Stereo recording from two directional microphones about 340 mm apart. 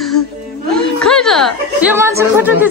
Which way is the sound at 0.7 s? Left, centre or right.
Centre.